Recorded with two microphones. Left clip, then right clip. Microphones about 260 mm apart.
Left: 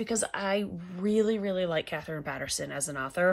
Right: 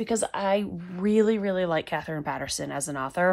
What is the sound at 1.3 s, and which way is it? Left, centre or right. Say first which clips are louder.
Speech: right 4 dB; right.